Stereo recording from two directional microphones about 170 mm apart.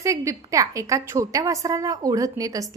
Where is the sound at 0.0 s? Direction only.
20° right (ahead or behind).